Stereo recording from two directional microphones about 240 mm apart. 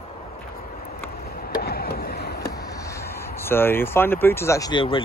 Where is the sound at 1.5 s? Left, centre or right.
Left.